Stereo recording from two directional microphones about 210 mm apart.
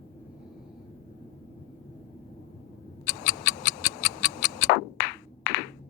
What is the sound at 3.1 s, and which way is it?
Music, 55° left (ahead or behind).